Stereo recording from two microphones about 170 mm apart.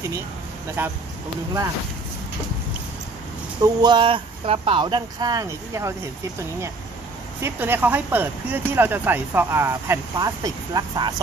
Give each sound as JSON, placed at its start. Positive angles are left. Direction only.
{"t": 0.8, "sound": "speech", "side_deg": -10}
{"t": 3.6, "sound": "speech", "side_deg": -25}
{"t": 7.4, "sound": "speech", "side_deg": -10}